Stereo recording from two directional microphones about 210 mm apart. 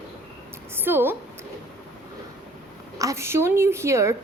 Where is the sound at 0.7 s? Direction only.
10° right (ahead or behind).